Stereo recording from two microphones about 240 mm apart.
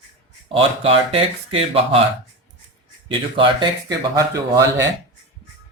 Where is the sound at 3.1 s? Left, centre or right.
Right.